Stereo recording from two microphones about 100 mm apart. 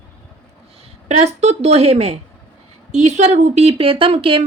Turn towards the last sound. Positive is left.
turn(degrees=-65)  # may be behind; listen again after turning